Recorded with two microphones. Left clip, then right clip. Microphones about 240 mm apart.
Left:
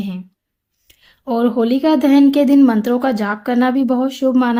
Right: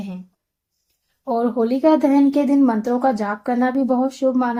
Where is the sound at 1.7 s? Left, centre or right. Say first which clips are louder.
Even; left.